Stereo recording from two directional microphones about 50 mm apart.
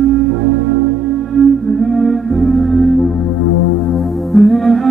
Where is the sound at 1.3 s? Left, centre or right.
Centre.